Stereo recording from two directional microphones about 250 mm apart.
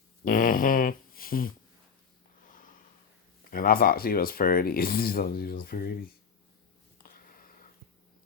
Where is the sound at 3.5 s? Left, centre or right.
Left.